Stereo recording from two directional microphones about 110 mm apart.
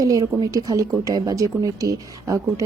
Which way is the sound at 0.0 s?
35° right (ahead or behind).